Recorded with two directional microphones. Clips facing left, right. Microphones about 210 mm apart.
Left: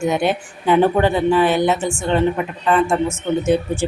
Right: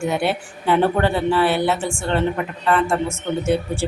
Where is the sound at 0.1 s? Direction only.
15° left (ahead or behind).